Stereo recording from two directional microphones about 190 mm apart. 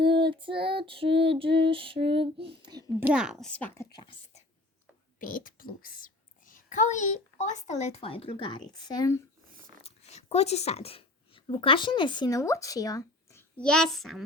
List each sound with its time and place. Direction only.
0.1 s child singing: 25° right (ahead or behind)
2.6 s whispering: 20° right (ahead or behind)
3.1 s a child's voice: 5° right (ahead or behind)
3.5 s speech: 10° left (ahead or behind)
3.9 s speech: 25° left (ahead or behind)
5.2 s a woman's voice: 45° left (ahead or behind); by 9.2 s 20° left (ahead or behind)
9.8 s speech: 35° left (ahead or behind); by 13.4 s 20° left (ahead or behind)
13.6 s a child's voice: 5° left (ahead or behind)